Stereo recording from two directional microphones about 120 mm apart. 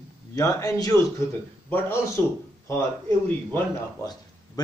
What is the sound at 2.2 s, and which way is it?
Speech, 20° left (ahead or behind).